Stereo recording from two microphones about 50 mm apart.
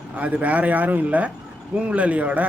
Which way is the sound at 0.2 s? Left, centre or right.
Right.